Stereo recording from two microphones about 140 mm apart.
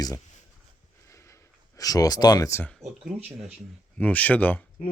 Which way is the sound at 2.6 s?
Centre (ahead or behind).